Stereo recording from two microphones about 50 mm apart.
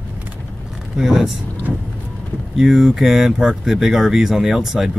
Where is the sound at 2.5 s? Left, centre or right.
Centre.